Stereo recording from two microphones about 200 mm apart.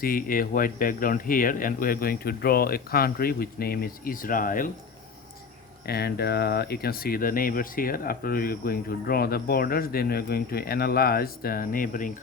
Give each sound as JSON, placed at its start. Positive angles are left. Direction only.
{"t": 0.0, "sound": "speech", "side_deg": 45}
{"t": 5.8, "sound": "speech", "side_deg": 50}